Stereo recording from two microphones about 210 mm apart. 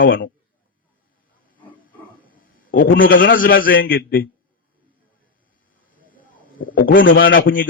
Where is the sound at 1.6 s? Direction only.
10° left (ahead or behind).